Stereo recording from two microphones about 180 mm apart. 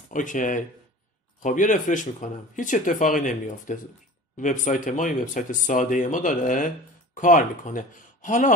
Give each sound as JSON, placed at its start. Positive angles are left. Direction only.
{"t": 0.1, "sound": "speech", "side_deg": 45}